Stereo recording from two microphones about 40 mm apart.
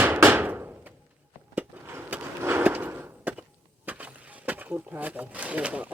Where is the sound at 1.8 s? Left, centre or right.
Right.